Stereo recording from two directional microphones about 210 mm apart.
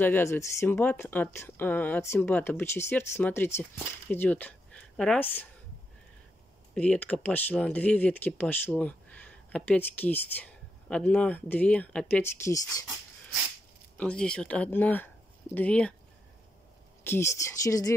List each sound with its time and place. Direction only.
0.0 s speech: 10° left (ahead or behind)
6.7 s speech: 5° left (ahead or behind)
13.9 s speech: 5° left (ahead or behind)
17.0 s speech: 10° left (ahead or behind)